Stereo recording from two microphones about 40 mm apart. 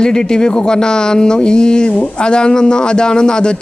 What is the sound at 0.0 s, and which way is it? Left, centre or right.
A man's voice, centre.